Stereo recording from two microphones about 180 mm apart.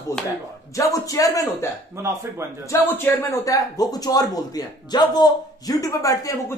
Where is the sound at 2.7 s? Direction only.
15° left (ahead or behind).